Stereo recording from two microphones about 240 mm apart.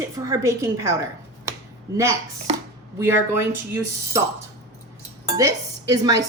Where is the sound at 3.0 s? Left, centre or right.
Centre.